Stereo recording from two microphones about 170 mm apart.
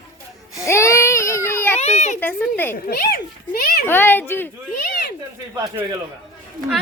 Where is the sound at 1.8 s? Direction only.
40° left (ahead or behind).